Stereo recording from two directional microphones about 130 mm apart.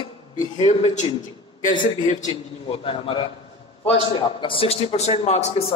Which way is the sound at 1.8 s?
90° left.